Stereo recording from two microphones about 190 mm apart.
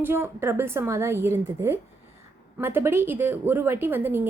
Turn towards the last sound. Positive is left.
turn(degrees=-10)  # may be behind; listen again after turning